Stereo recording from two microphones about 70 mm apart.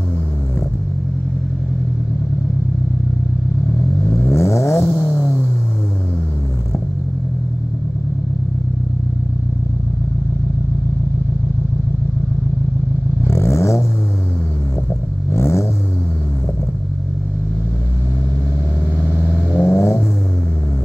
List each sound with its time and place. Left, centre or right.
4.2 s vehicle: left
13.2 s vehicle: left
15.3 s vehicle: left
18.9 s vehicle: centre
19.6 s vehicle: left